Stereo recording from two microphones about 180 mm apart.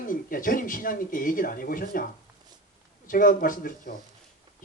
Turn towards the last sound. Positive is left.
turn(degrees=50)  # may be behind; listen again after turning